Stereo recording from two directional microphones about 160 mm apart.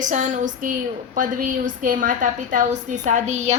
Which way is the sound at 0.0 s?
50° right (ahead or behind).